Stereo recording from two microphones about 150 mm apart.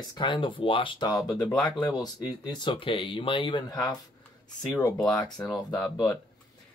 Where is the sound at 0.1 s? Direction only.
30° left (ahead or behind).